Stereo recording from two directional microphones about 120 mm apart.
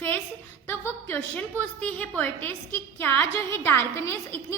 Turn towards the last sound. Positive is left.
turn(degrees=20)  # may be behind; listen again after turning